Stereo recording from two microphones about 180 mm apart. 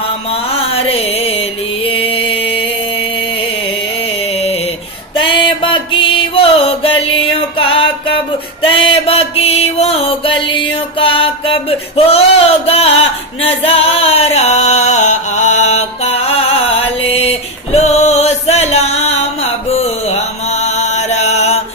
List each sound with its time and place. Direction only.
0.3 s mantra: 35° left (ahead or behind)
4.2 s music: 35° left (ahead or behind)
17.0 s a sound: 35° left (ahead or behind)